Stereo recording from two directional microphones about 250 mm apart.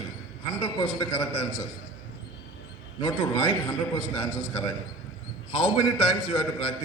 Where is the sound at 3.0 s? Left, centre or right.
Centre.